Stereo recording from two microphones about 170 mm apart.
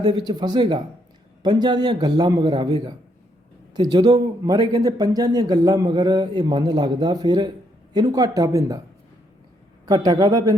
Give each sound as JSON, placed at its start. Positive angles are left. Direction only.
{"t": 0.3, "sound": "speech", "side_deg": -25}
{"t": 9.8, "sound": "speech", "side_deg": -20}